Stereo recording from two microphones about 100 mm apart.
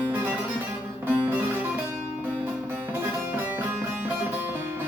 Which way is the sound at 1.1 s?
20° right (ahead or behind).